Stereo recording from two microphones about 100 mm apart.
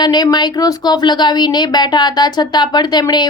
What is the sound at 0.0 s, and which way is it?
A woman's voice, 45° left (ahead or behind).